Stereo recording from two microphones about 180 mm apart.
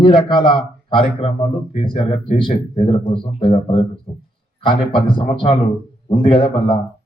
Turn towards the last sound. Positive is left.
turn(degrees=25)  # may be behind; listen again after turning